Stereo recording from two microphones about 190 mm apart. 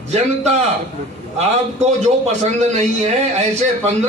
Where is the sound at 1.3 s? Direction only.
35° right (ahead or behind).